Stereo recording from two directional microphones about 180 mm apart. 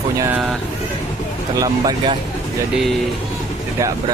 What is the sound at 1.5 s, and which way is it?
Speech, 20° right (ahead or behind).